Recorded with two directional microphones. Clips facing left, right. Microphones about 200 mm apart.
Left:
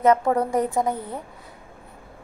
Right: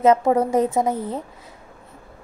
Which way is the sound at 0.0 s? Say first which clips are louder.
Right 3 dB; 20° right (ahead or behind).